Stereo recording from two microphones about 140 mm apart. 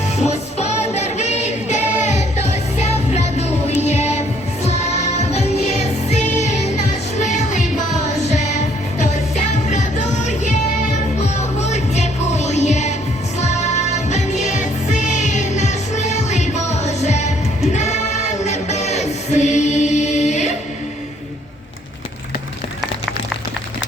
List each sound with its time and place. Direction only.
0.2 s music: 50° left (ahead or behind)
11.6 s music: 55° left (ahead or behind)